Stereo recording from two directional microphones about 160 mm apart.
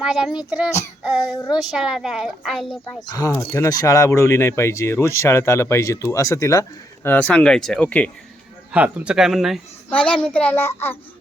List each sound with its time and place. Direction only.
0.0 s a woman's voice: centre (ahead or behind)
1.4 s speech: 25° left (ahead or behind)
1.7 s a woman's voice: 5° right (ahead or behind)
3.1 s speech: 20° left (ahead or behind)
8.7 s a woman's voice: 10° right (ahead or behind)
9.9 s speech: 10° left (ahead or behind)